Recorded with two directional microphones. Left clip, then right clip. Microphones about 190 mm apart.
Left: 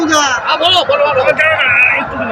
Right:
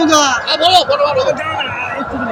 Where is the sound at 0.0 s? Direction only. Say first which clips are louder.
Right 1 dB; 90° right.